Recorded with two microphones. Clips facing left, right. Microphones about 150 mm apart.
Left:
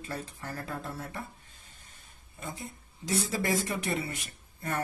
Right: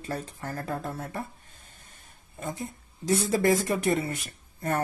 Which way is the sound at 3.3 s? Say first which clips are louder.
Right 9 dB; 50° right (ahead or behind).